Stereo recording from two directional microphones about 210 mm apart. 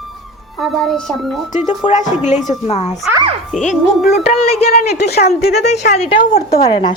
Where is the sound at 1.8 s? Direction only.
20° left (ahead or behind).